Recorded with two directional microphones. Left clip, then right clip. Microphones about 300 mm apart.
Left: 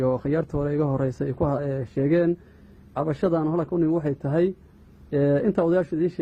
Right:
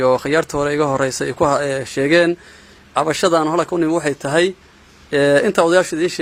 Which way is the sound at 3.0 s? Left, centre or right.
Centre.